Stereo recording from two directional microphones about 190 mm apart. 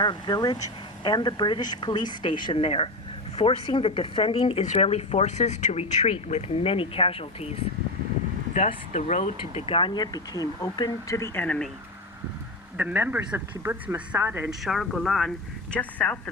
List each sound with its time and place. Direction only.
0.0 s speech: 25° left (ahead or behind)
8.5 s speech: 40° left (ahead or behind); by 11.7 s 5° left (ahead or behind)
12.7 s a woman's voice: 10° right (ahead or behind); by 16.3 s 5° left (ahead or behind)